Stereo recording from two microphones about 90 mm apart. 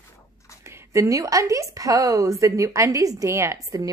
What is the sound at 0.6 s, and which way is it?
A woman's voice, 30° right (ahead or behind).